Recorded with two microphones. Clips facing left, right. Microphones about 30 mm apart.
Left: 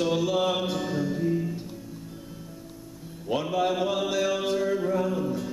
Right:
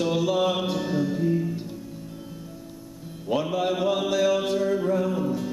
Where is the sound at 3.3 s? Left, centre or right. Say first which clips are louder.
Right 1 dB; centre.